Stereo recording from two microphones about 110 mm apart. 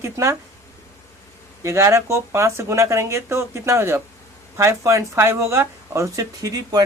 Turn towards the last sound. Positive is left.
turn(degrees=-30)  # may be behind; listen again after turning